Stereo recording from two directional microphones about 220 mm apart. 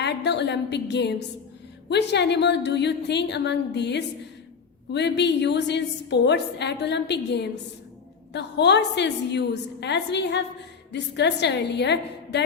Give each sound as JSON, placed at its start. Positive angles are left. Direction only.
{"t": 0.0, "sound": "a woman's voice", "side_deg": 50}